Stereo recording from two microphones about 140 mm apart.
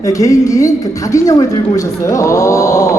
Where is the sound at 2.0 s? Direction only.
20° left (ahead or behind).